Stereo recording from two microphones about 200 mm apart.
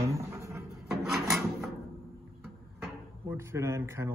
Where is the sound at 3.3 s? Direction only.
15° right (ahead or behind).